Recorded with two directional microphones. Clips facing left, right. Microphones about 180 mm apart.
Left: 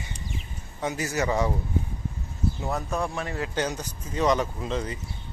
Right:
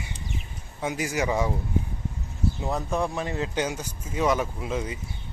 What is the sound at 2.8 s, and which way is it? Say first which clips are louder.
Speech: right 4 dB; centre (ahead or behind).